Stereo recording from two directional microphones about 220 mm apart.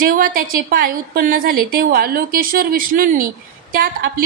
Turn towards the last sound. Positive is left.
turn(degrees=-40)  # may be behind; listen again after turning